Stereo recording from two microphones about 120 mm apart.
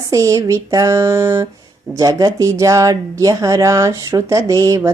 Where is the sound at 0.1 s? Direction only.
25° right (ahead or behind).